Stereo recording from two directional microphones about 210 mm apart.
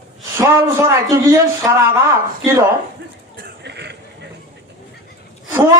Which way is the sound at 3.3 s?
50° right (ahead or behind).